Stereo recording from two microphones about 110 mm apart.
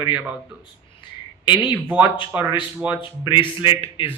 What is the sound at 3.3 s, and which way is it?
Speech, 50° left (ahead or behind).